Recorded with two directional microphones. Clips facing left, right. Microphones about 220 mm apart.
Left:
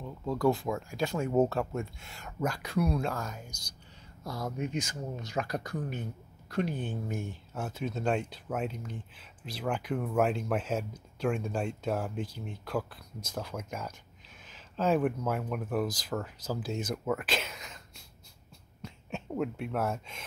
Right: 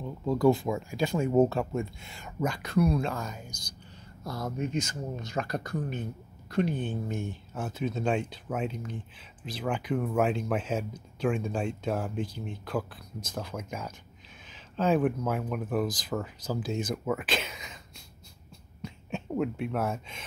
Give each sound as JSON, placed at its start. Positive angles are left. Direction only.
{"t": 0.0, "sound": "speech", "side_deg": -5}
{"t": 4.6, "sound": "speech", "side_deg": 10}
{"t": 18.8, "sound": "speech", "side_deg": 0}